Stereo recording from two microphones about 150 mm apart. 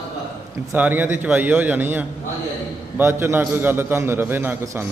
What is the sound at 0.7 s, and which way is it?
A man's voice, 10° right (ahead or behind).